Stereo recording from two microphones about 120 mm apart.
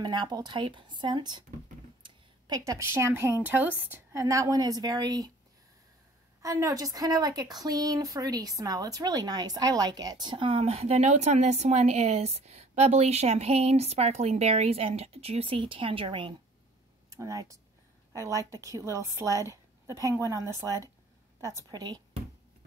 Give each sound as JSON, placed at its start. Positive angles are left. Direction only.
{"t": 0.0, "sound": "speech", "side_deg": -35}
{"t": 2.0, "sound": "a sound", "side_deg": -40}
{"t": 2.6, "sound": "a woman's voice", "side_deg": -25}
{"t": 4.2, "sound": "speech", "side_deg": -25}
{"t": 6.4, "sound": "a woman's voice", "side_deg": -30}
{"t": 17.1, "sound": "a woman's voice", "side_deg": -30}